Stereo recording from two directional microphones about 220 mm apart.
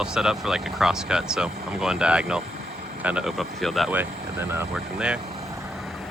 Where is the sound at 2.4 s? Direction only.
40° right (ahead or behind).